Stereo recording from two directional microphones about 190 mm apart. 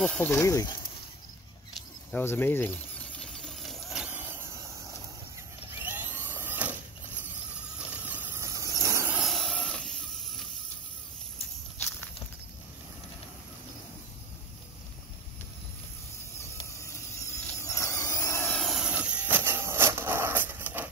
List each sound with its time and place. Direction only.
0.0 s speech: 5° left (ahead or behind)
2.1 s speech: 10° left (ahead or behind)
3.2 s vehicle: 5° left (ahead or behind)
5.9 s mechanisms: 10° right (ahead or behind)
7.9 s vehicle: 10° right (ahead or behind)
9.2 s a sound: centre (ahead or behind)
16.3 s a sound: 15° left (ahead or behind)
18.5 s vehicle: centre (ahead or behind)